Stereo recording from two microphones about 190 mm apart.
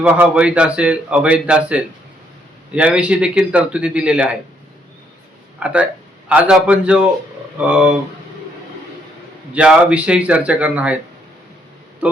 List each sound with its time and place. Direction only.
0.0 s a man's voice: 10° right (ahead or behind)
5.5 s a man's voice: 5° right (ahead or behind)
9.5 s speech: 5° right (ahead or behind)